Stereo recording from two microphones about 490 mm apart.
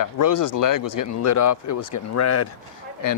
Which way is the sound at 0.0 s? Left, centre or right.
Left.